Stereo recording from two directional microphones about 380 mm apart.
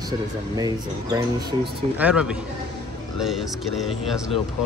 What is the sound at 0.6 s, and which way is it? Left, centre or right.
Speech, centre.